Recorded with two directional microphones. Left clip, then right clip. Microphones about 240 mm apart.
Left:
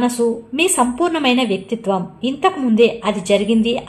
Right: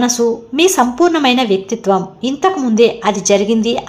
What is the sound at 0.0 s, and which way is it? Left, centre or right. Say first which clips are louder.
A woman's voice: right 3 dB; centre.